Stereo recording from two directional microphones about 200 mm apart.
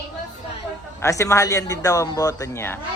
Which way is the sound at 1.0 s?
15° left (ahead or behind).